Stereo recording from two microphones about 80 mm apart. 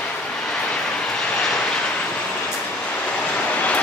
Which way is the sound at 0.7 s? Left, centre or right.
Centre.